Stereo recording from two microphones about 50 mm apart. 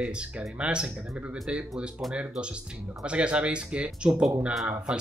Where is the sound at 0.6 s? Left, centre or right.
Right.